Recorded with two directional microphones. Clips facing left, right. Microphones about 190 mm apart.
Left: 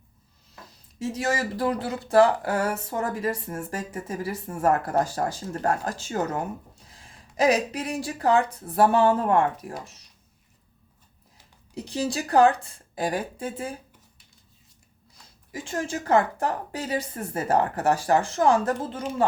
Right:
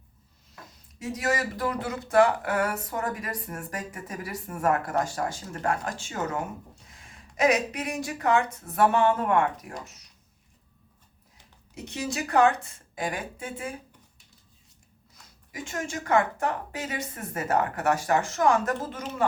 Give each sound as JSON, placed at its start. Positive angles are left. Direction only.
{"t": 1.1, "sound": "speech", "side_deg": 25}
{"t": 11.7, "sound": "speech", "side_deg": 35}
{"t": 15.5, "sound": "speech", "side_deg": 30}